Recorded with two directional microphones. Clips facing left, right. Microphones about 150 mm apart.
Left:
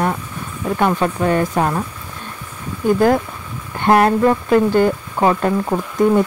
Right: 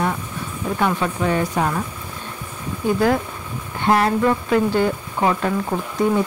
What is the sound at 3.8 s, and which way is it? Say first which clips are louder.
Speech: left 4 dB; 55° left (ahead or behind).